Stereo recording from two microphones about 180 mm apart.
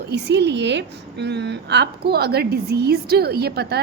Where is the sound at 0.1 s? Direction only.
70° right (ahead or behind).